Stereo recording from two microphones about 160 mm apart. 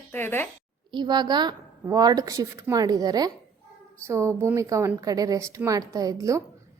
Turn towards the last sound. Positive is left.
turn(degrees=-20)  # may be behind; listen again after turning